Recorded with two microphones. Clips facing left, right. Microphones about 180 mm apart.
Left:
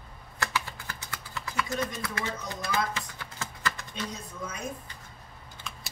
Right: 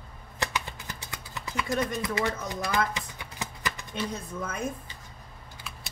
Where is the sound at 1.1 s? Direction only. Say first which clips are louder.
Even; 20° right (ahead or behind).